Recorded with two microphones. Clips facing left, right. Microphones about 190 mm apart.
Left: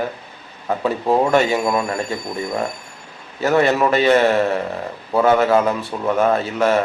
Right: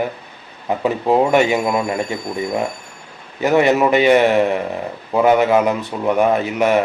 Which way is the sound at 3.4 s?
15° right (ahead or behind).